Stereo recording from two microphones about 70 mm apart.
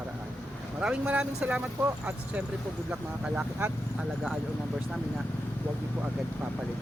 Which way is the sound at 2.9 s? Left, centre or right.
Centre.